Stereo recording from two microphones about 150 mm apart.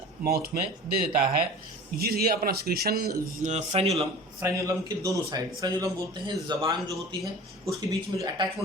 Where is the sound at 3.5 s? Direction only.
45° right (ahead or behind).